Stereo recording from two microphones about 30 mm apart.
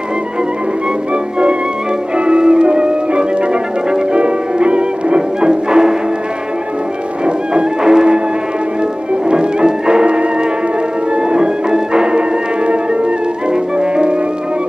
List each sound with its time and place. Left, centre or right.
2.1 s music: right
7.8 s music: right
9.3 s music: right
11.2 s music: right